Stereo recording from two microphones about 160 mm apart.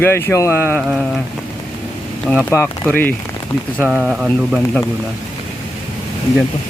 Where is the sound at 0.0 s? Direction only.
15° left (ahead or behind).